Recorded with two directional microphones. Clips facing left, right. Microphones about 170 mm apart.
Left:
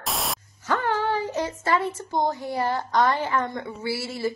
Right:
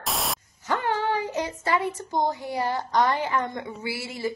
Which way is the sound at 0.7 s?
15° right (ahead or behind).